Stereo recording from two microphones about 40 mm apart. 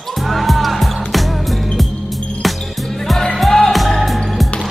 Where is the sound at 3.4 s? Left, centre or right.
Centre.